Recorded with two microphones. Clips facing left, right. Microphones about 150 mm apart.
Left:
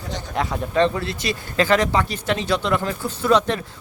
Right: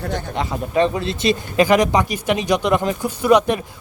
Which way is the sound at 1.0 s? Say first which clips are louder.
Right 7 dB; 20° right (ahead or behind).